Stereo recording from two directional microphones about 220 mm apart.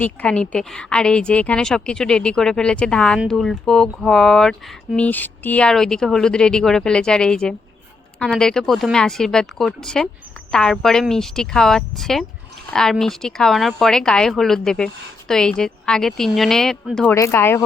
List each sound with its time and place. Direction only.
0.0 s a woman's voice: 5° left (ahead or behind)